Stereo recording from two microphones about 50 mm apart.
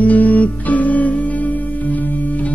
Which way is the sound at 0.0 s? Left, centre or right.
Left.